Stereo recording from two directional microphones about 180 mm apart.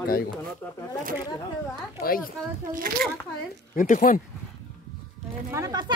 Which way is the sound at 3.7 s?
45° left (ahead or behind).